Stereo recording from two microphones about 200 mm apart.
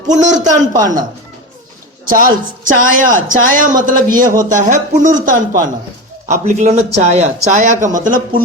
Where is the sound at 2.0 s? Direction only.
45° right (ahead or behind).